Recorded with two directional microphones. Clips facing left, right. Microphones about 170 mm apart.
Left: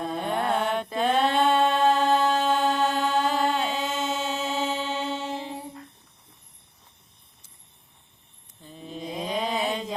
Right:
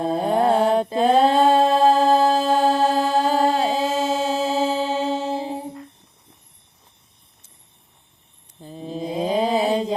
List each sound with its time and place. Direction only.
0.0 s mantra: 35° right (ahead or behind)
8.6 s mantra: 35° right (ahead or behind)